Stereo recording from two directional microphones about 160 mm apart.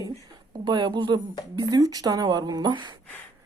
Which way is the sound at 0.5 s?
30° right (ahead or behind).